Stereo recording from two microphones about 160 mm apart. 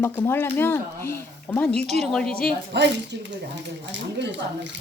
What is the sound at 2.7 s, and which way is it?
Speech, 90° right.